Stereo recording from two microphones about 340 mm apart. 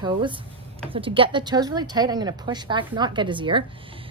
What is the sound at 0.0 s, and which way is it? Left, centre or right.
Speech, centre.